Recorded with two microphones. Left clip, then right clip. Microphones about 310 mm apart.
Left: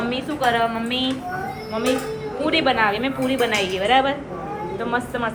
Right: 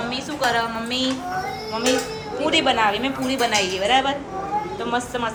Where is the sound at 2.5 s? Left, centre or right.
Centre.